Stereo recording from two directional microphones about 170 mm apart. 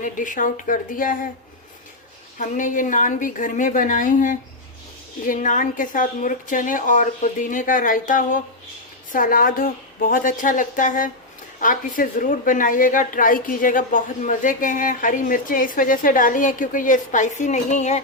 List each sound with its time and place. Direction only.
0.0 s a woman's voice: 50° left (ahead or behind)
2.4 s a woman's voice: 50° left (ahead or behind)